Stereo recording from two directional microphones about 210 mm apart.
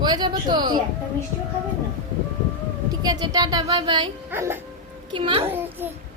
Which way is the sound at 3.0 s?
20° right (ahead or behind).